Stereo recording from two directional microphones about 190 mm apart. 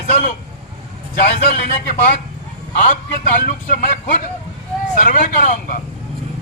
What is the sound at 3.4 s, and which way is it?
Speech, 45° left (ahead or behind).